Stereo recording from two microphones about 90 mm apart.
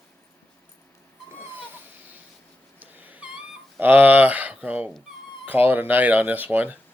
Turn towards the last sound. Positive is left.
turn(degrees=-20)  # may be behind; listen again after turning